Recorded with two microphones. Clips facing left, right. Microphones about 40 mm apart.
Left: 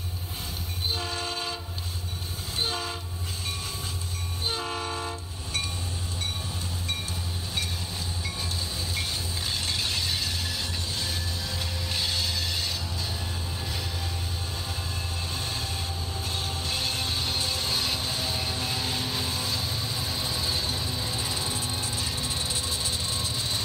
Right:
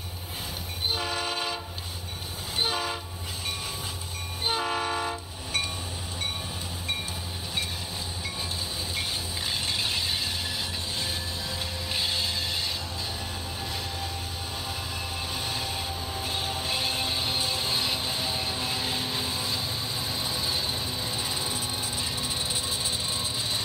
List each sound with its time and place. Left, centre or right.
0.9 s train: right
2.6 s train: right
4.5 s train: right
9.5 s a sound: centre
11.9 s a sound: centre
15.3 s train: right